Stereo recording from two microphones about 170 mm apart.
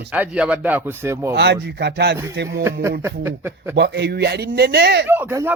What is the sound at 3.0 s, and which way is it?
Speech, 10° right (ahead or behind).